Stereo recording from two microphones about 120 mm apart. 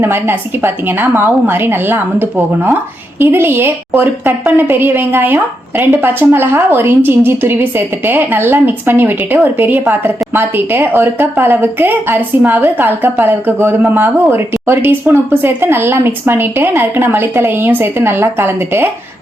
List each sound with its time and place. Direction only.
0.0 s a woman's voice: 20° right (ahead or behind)